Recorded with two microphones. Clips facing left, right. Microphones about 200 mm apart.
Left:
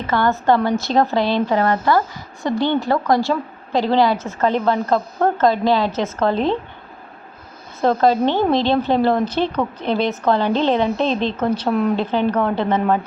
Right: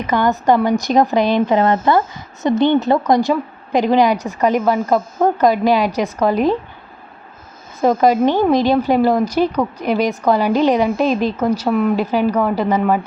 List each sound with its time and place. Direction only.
0.0 s speech: 15° right (ahead or behind)
7.8 s speech: 10° right (ahead or behind)